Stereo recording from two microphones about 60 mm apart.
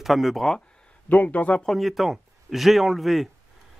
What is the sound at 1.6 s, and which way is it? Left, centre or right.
A man's voice, centre.